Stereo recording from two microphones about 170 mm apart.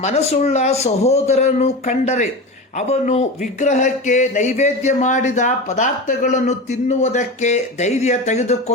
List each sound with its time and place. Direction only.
0.0 s speech: 40° left (ahead or behind)